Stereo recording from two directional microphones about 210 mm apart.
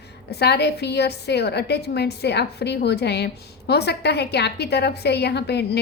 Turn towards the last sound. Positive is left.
turn(degrees=50)  # may be behind; listen again after turning